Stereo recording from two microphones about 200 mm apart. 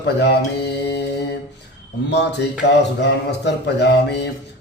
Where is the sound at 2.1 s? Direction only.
60° left (ahead or behind).